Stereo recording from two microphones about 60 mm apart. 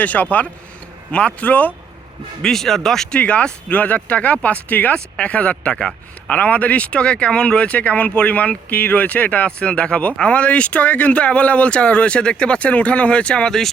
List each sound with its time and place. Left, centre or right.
0.0 s speech: left
2.4 s speech: centre
3.2 s speech: left
4.9 s speech: centre